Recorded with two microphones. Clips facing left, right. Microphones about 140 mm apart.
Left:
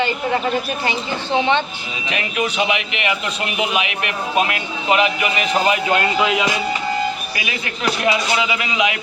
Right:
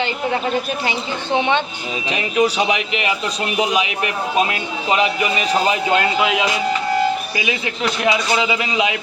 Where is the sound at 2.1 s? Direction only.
30° right (ahead or behind).